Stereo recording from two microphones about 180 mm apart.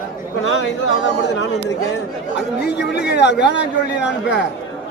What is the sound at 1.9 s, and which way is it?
Speech, 65° left (ahead or behind).